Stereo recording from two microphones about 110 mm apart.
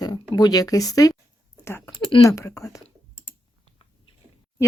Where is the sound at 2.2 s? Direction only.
30° left (ahead or behind).